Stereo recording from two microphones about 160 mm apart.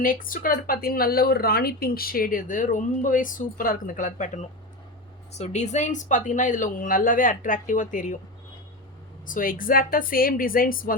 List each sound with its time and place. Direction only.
0.0 s speech: 60° left (ahead or behind)
9.2 s speech: 60° left (ahead or behind)